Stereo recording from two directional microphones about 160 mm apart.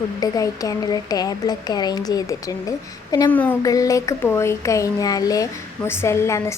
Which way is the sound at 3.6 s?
20° left (ahead or behind).